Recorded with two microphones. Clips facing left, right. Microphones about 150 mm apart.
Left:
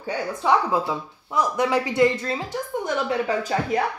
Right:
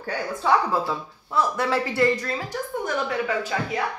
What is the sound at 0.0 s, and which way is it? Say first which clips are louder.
A woman's voice: left 1 dB; 15° left (ahead or behind).